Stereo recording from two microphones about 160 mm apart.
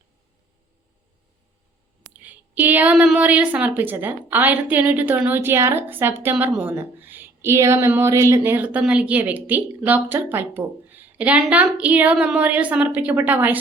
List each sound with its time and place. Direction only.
2.2 s speech: 10° right (ahead or behind)